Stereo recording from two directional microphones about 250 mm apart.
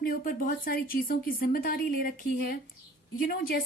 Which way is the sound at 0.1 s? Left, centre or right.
Left.